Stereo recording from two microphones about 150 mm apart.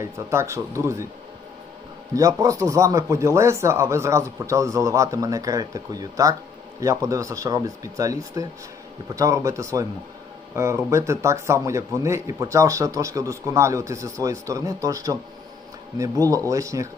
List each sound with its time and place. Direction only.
0.0 s speech: 20° right (ahead or behind)
2.1 s speech: 25° right (ahead or behind)